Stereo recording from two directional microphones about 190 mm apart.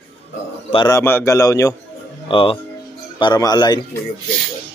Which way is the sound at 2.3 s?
25° left (ahead or behind).